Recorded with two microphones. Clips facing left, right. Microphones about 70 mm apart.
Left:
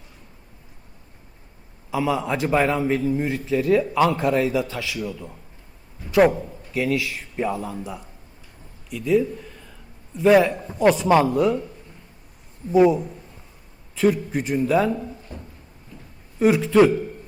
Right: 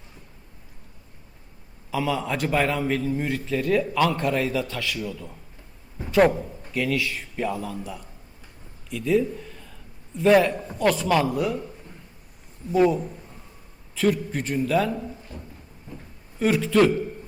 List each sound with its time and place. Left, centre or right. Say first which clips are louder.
1.9 s a man's voice: left 3 dB; centre
6.1 s a man's voice: left 2 dB; centre
7.4 s a man's voice: left 2 dB; centre
8.9 s a man's voice: left 2 dB; centre
10.8 s speech: left 5 dB; centre
12.7 s a man's voice: left 4 dB; centre
13.9 s a man's voice: left 3 dB; centre
16.4 s a man's voice: left 4 dB; centre